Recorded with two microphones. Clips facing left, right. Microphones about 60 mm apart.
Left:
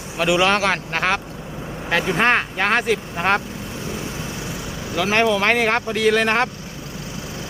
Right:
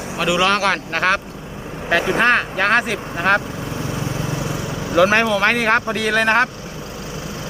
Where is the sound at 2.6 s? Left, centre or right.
Centre.